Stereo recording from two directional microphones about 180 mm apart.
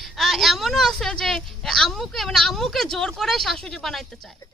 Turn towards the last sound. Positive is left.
turn(degrees=0)  # may be behind; listen again after turning